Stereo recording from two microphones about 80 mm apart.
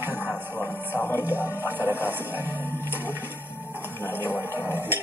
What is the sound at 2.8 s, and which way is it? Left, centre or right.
Music, right.